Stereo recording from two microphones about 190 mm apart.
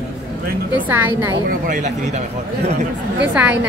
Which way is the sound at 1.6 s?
40° right (ahead or behind).